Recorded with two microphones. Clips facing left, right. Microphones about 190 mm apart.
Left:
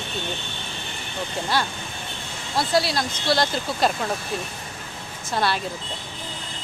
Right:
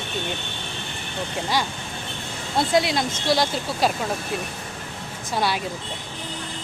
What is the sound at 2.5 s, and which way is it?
Speech, 20° right (ahead or behind).